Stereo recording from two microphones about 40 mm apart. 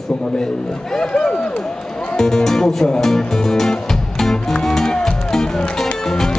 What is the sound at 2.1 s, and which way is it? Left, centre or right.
Speech, centre.